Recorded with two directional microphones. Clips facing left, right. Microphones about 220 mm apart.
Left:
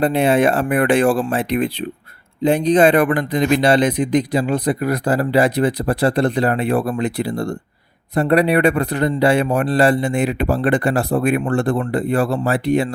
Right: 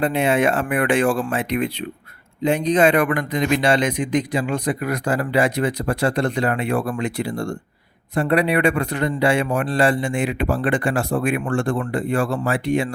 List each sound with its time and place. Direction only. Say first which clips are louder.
0.0 s a man's voice: left 3 dB; 35° left (ahead or behind)